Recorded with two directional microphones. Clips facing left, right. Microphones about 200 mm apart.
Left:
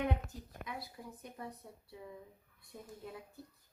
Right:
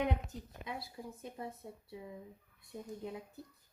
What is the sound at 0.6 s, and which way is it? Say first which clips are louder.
Speech: right 2 dB; 25° right (ahead or behind).